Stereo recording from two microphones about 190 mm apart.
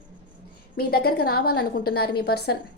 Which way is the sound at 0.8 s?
55° left (ahead or behind).